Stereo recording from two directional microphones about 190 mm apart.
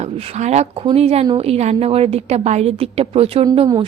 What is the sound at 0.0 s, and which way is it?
A woman's voice, 35° right (ahead or behind).